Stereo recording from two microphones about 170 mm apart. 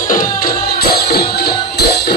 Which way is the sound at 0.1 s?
55° left (ahead or behind).